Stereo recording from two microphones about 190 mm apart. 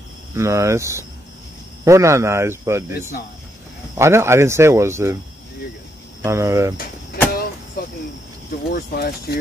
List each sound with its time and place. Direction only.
0.4 s speech: 15° right (ahead or behind)
3.9 s speech: 15° right (ahead or behind)
6.2 s speech: 15° right (ahead or behind)
8.7 s speech: 55° left (ahead or behind)